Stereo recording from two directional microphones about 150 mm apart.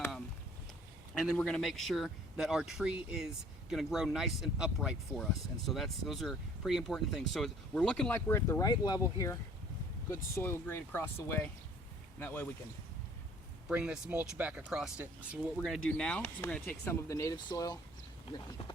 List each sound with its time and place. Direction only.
1.4 s speech: 5° left (ahead or behind)
8.3 s speech: 20° left (ahead or behind)
13.7 s speech: 5° right (ahead or behind)
15.5 s speech: 5° left (ahead or behind); by 17.7 s 25° left (ahead or behind)